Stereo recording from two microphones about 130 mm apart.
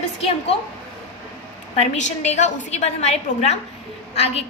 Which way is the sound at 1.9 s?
65° left (ahead or behind).